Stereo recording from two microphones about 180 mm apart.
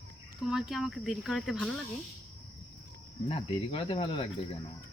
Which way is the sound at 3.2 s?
30° left (ahead or behind).